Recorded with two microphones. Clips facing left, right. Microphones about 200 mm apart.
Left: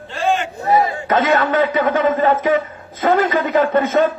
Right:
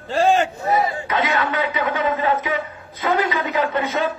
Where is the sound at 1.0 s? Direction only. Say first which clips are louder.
Left 6 dB; 45° left (ahead or behind).